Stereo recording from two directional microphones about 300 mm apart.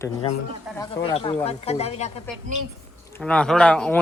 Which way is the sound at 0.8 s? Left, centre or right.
Centre.